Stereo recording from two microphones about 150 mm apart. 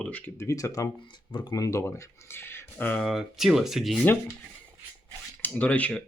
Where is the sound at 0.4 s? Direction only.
20° left (ahead or behind).